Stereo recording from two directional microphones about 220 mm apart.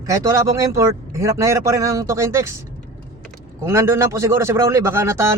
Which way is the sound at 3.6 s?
10° right (ahead or behind).